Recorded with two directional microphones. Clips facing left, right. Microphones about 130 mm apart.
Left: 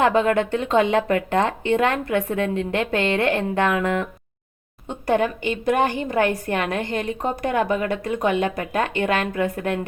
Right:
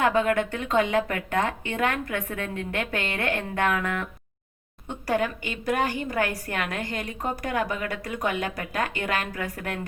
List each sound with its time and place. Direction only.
0.0 s a woman's voice: 25° left (ahead or behind)